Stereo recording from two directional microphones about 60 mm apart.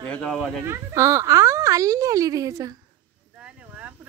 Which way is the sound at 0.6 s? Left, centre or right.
Right.